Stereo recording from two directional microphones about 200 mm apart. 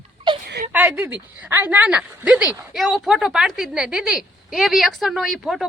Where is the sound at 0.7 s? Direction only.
10° right (ahead or behind).